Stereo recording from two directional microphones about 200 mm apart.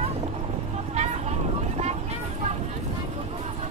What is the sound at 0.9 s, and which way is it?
Vehicle, 35° right (ahead or behind).